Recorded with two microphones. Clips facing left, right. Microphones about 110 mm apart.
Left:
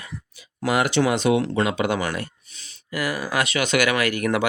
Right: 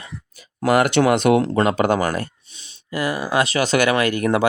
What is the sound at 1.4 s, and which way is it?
Speech, 40° right (ahead or behind).